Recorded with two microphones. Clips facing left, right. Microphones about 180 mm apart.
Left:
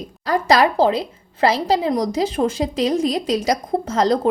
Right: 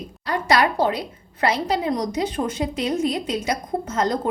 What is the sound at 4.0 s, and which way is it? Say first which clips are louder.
Speech: left 5 dB; 30° left (ahead or behind).